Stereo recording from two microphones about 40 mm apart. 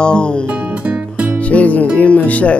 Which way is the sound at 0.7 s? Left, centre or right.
Right.